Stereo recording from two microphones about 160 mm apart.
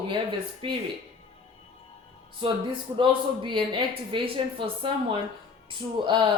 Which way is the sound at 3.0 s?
30° right (ahead or behind).